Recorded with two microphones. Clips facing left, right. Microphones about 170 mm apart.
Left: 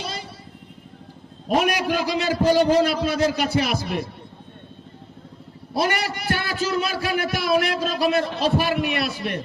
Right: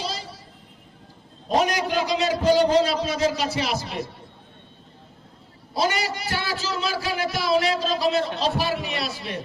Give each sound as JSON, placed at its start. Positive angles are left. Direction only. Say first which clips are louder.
{"t": 0.0, "sound": "vehicle", "louder": "right 1 dB", "side_deg": 55}
{"t": 1.5, "sound": "a man's voice", "louder": "left 1 dB", "side_deg": 60}
{"t": 5.7, "sound": "a man's voice", "louder": "left 1 dB", "side_deg": 60}